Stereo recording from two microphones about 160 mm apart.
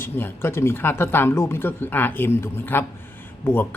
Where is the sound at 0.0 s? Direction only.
15° left (ahead or behind).